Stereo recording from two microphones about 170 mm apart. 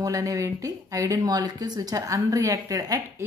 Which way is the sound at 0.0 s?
20° right (ahead or behind).